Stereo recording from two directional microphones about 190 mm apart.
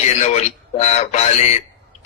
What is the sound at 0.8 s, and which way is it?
Speech, 35° left (ahead or behind).